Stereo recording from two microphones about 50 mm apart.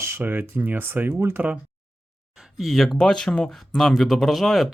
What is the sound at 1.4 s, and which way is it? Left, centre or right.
Speech, right.